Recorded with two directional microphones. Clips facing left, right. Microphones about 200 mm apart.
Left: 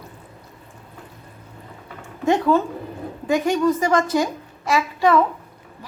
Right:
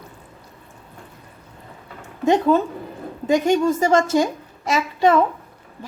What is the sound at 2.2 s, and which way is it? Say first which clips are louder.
A woman's voice: right 1 dB; 20° right (ahead or behind).